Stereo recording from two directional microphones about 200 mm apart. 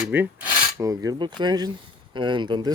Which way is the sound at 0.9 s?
20° right (ahead or behind).